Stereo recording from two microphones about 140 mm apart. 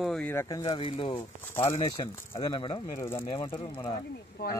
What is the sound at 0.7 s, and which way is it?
Speech, 40° left (ahead or behind).